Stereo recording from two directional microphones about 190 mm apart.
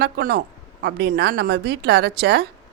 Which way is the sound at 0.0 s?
55° right (ahead or behind).